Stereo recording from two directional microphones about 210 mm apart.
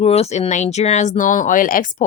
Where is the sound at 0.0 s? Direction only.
30° left (ahead or behind).